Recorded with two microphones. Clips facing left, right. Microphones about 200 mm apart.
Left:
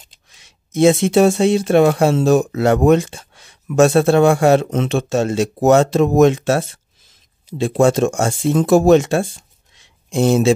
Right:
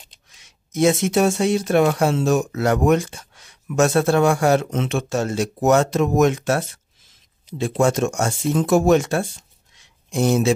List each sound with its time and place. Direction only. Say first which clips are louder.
0.7 s speech: left 5 dB; 30° left (ahead or behind)